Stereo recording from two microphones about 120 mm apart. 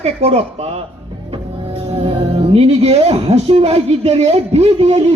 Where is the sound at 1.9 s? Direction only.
50° right (ahead or behind).